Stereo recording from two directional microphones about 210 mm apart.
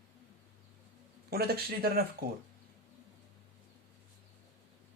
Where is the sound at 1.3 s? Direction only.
45° right (ahead or behind).